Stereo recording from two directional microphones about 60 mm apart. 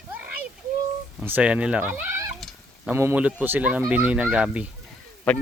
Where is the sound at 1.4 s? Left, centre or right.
Centre.